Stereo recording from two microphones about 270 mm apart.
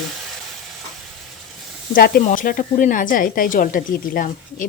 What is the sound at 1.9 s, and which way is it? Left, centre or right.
Speech, left.